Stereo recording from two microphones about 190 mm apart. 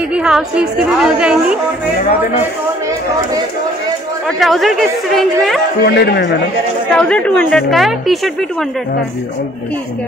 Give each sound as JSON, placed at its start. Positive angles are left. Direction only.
{"t": 0.1, "sound": "a woman's voice", "side_deg": -5}
{"t": 4.4, "sound": "a woman's voice", "side_deg": 0}
{"t": 5.9, "sound": "speech", "side_deg": 60}
{"t": 6.9, "sound": "a woman's voice", "side_deg": 5}